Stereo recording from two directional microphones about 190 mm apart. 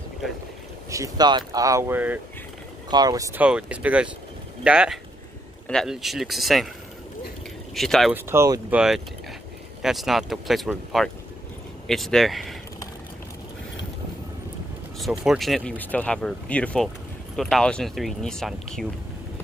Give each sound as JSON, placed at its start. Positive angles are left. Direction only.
{"t": 0.8, "sound": "speech", "side_deg": -15}
{"t": 3.3, "sound": "speech", "side_deg": -5}
{"t": 7.7, "sound": "speech", "side_deg": 0}
{"t": 8.1, "sound": "speech", "side_deg": -15}
{"t": 15.0, "sound": "speech", "side_deg": 0}